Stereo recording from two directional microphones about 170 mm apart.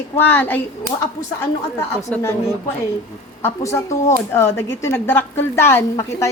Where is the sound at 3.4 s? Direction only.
20° left (ahead or behind).